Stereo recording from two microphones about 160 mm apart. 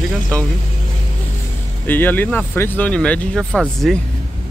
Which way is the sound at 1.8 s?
10° left (ahead or behind).